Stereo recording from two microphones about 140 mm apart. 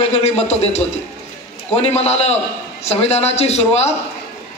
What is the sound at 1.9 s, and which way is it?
A man's voice, 50° left (ahead or behind).